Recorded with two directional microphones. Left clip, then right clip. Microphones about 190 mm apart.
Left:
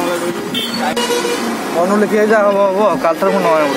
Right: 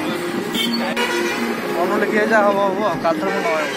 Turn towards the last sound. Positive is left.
turn(degrees=55)  # may be behind; listen again after turning